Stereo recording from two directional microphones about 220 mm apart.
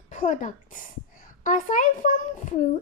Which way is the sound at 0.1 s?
35° left (ahead or behind).